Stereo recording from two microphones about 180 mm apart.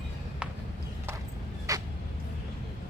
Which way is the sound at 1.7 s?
20° right (ahead or behind).